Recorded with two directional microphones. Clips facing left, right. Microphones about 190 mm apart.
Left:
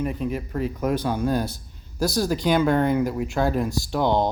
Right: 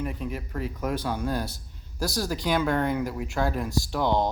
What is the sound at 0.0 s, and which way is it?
Speech, 25° left (ahead or behind).